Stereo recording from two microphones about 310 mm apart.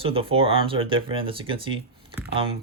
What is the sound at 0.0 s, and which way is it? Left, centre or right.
Speech, centre.